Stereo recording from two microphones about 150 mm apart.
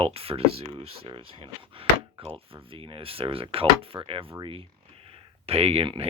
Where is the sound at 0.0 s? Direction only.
40° right (ahead or behind).